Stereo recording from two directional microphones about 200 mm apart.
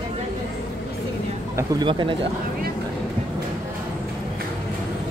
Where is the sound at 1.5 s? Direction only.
20° right (ahead or behind).